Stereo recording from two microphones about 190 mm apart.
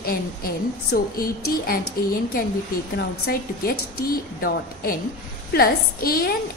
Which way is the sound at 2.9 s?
50° left (ahead or behind).